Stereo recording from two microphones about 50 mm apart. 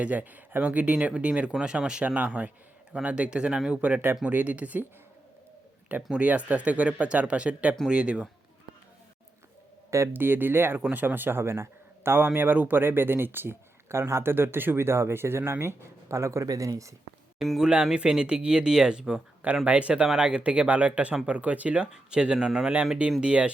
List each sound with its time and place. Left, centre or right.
0.0 s speech: right
1.5 s speech: centre
2.0 s speech: right
6.1 s speech: right
10.1 s a man's voice: right
17.6 s speech: centre